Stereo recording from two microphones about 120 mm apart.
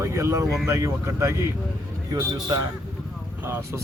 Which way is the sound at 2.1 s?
35° right (ahead or behind).